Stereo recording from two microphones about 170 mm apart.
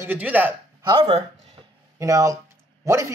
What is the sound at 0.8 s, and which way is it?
Speech, 30° right (ahead or behind).